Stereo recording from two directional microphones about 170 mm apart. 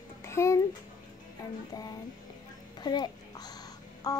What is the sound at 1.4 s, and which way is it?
Music, 20° left (ahead or behind).